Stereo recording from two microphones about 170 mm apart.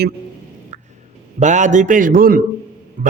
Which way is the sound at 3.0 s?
55° right (ahead or behind).